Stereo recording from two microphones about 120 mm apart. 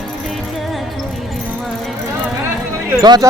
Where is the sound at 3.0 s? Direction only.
35° right (ahead or behind).